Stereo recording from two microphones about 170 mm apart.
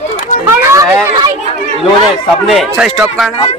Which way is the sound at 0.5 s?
15° right (ahead or behind).